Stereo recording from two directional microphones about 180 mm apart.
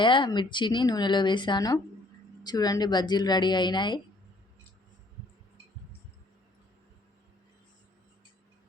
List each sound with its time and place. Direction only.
0.0 s speech: 25° left (ahead or behind)